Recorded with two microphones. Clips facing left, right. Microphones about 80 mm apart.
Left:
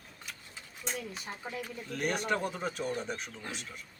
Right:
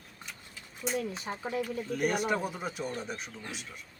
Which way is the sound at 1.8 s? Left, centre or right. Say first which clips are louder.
Right 2 dB; centre.